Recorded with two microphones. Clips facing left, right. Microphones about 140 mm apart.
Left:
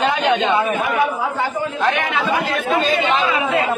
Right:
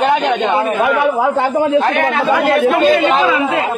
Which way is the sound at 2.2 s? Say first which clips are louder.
Right 8 dB; 65° right (ahead or behind).